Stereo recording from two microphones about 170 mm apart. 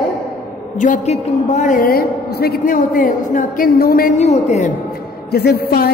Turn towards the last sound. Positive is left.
turn(degrees=65)  # may be behind; listen again after turning